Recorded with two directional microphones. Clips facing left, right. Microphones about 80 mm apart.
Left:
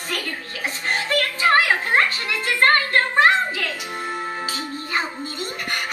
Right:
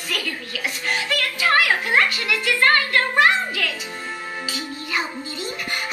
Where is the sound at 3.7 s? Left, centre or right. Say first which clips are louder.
Left 3 dB; left.